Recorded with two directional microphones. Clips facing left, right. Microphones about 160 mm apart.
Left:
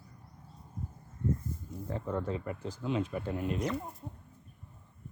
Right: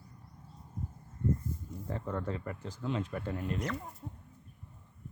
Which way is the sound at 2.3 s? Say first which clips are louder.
Left 2 dB; 10° left (ahead or behind).